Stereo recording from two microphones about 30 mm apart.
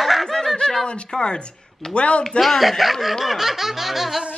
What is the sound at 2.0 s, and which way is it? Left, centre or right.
Speech, left.